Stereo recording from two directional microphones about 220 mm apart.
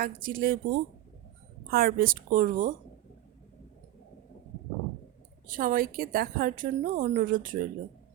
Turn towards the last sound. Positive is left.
turn(degrees=-35)  # may be behind; listen again after turning